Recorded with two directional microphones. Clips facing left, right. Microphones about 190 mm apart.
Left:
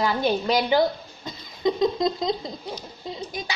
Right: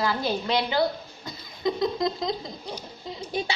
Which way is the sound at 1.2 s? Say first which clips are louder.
Left 3 dB; 20° left (ahead or behind).